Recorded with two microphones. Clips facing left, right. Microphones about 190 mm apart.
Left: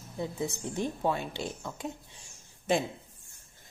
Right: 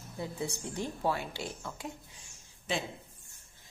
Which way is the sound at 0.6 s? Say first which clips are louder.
Left 3 dB; 20° left (ahead or behind).